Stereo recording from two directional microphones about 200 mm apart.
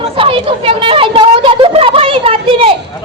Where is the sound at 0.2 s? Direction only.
25° right (ahead or behind).